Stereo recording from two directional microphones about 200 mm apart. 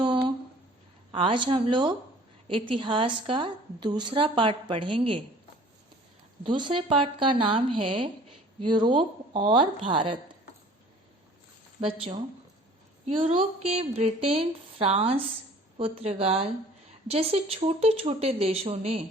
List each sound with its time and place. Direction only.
0.0 s a sound: 25° right (ahead or behind)
1.1 s a woman's voice: 25° right (ahead or behind)
6.4 s a woman's voice: 25° right (ahead or behind)
11.8 s a woman's voice: 25° right (ahead or behind)